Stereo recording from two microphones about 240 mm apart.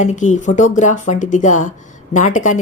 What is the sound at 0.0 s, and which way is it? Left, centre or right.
A woman's voice, left.